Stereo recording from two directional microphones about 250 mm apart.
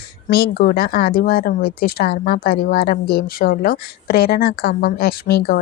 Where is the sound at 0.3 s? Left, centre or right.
Left.